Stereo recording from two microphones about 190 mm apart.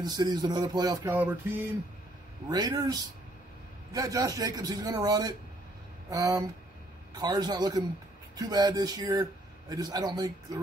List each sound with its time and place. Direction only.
0.0 s speech: 20° right (ahead or behind)
1.0 s music: 10° right (ahead or behind)
2.5 s speech: 20° right (ahead or behind)